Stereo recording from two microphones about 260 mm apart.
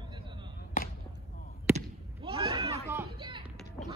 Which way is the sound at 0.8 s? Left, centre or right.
Left.